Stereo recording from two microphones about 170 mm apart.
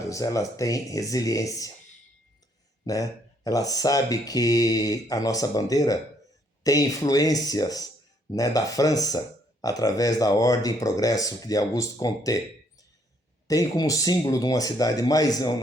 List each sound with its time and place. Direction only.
0.1 s speech: 20° left (ahead or behind)
2.8 s speech: 20° left (ahead or behind)
13.5 s speech: 20° left (ahead or behind)